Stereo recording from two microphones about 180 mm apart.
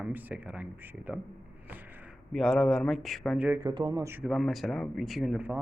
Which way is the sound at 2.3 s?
5° left (ahead or behind).